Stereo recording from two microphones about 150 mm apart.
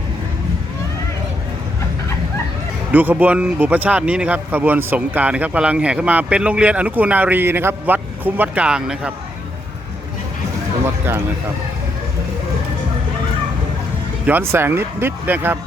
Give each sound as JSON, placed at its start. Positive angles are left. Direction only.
{"t": 2.9, "sound": "speech", "side_deg": -10}
{"t": 10.8, "sound": "speech", "side_deg": -15}
{"t": 14.3, "sound": "speech", "side_deg": -15}